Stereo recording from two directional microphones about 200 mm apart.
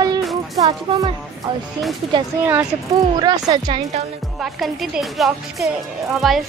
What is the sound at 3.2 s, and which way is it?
Speech, 20° right (ahead or behind).